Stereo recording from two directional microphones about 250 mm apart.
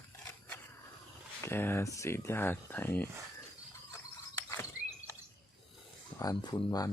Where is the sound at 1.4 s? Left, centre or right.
Centre.